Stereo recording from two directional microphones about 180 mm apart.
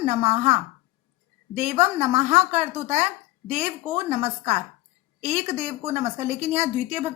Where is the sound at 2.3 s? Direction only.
40° right (ahead or behind).